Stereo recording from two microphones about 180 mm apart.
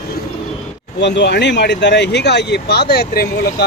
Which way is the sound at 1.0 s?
75° left (ahead or behind).